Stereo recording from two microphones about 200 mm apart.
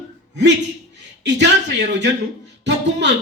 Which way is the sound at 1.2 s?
60° right (ahead or behind).